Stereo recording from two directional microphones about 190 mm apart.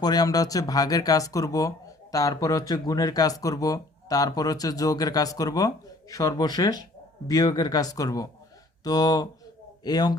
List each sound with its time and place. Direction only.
0.0 s speech: 20° left (ahead or behind)